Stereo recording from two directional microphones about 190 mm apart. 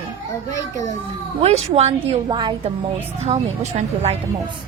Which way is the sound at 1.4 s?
35° right (ahead or behind).